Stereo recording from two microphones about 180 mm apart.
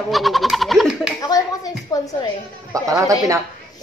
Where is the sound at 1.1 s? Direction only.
20° left (ahead or behind).